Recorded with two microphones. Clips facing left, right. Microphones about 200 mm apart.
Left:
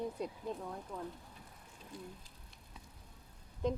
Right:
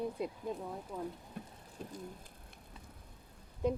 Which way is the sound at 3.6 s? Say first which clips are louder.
Right 2 dB; 10° right (ahead or behind).